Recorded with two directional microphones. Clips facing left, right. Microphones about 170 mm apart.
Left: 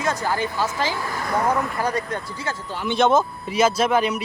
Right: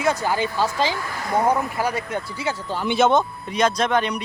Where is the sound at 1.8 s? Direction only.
10° right (ahead or behind).